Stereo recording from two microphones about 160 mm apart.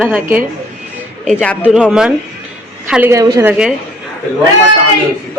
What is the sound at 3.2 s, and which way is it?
Speech, 20° right (ahead or behind).